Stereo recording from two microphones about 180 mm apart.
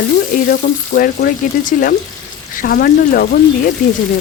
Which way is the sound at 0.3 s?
55° left (ahead or behind).